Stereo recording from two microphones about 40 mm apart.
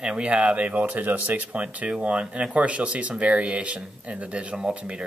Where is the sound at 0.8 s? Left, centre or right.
Right.